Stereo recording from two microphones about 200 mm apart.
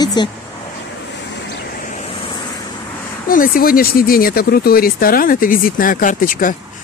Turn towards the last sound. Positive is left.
turn(degrees=45)  # may be behind; listen again after turning